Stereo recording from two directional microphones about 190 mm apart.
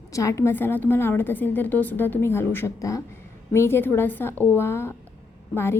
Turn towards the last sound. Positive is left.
turn(degrees=15)  # may be behind; listen again after turning